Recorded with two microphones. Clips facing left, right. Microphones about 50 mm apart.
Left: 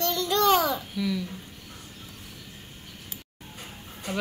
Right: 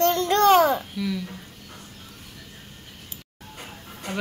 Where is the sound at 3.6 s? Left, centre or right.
Right.